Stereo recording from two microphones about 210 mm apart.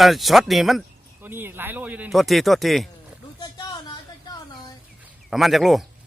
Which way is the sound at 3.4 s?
20° left (ahead or behind).